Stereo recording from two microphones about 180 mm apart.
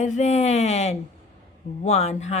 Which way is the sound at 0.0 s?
40° left (ahead or behind).